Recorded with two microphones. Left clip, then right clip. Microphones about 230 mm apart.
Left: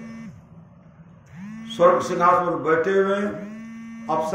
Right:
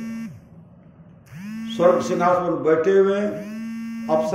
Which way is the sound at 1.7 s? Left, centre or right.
Centre.